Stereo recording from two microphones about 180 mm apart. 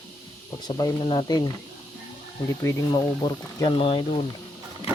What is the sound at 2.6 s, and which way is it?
Speech, 15° left (ahead or behind).